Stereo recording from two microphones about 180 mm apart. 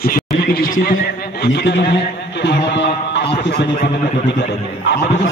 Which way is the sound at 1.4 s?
70° left (ahead or behind).